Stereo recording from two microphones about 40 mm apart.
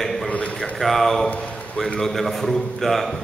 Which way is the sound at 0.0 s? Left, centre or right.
Centre.